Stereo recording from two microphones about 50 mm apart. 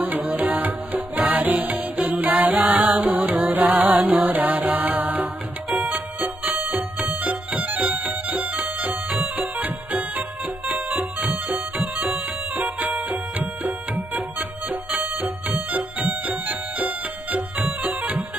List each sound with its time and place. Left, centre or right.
0.3 s music: right